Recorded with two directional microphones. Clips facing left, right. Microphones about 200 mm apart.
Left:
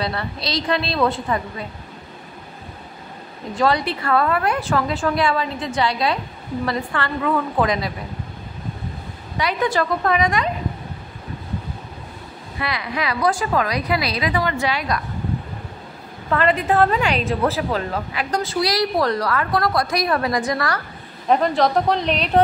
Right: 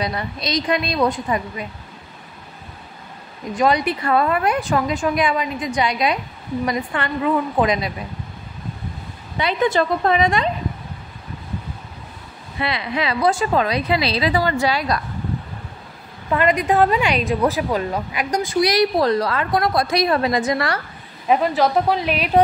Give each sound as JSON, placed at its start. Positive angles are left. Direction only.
{"t": 0.0, "sound": "a woman's voice", "side_deg": -15}
{"t": 3.5, "sound": "a woman's voice", "side_deg": -15}
{"t": 9.4, "sound": "a woman's voice", "side_deg": -25}
{"t": 12.5, "sound": "a woman's voice", "side_deg": -25}
{"t": 16.3, "sound": "a woman's voice", "side_deg": -10}
{"t": 21.3, "sound": "a woman's voice", "side_deg": -5}